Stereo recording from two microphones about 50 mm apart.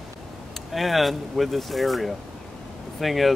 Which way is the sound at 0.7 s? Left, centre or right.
Centre.